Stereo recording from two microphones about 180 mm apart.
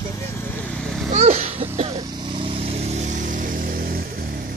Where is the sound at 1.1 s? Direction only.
35° right (ahead or behind).